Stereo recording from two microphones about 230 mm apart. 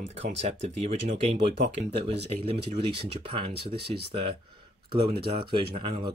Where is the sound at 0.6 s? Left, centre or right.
Right.